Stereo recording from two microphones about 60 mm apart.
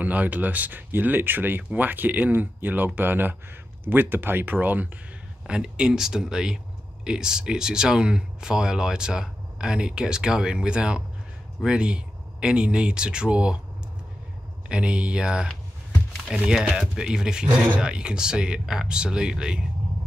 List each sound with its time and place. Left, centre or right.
0.0 s speech: right
5.5 s speech: centre
14.7 s speech: centre
16.4 s speech: centre